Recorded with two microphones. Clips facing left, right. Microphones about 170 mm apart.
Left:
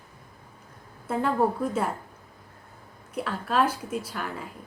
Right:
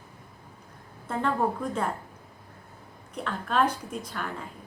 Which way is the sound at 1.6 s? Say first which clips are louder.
Left 3 dB; 5° left (ahead or behind).